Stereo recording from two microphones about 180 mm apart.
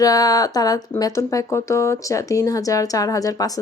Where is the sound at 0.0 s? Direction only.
20° left (ahead or behind).